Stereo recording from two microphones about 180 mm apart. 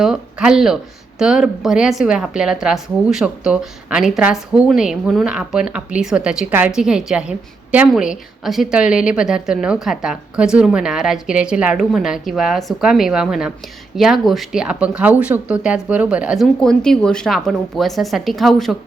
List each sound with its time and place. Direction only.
0.0 s a woman's voice: 5° right (ahead or behind)